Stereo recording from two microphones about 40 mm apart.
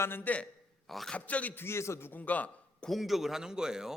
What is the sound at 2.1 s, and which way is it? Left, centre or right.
Speech, left.